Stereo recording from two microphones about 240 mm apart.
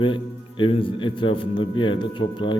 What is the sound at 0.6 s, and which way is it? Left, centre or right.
Speech, left.